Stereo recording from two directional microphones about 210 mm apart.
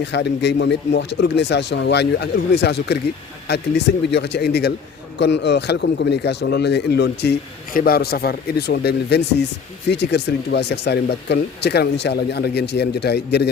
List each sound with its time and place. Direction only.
0.0 s a man's voice: 55° left (ahead or behind)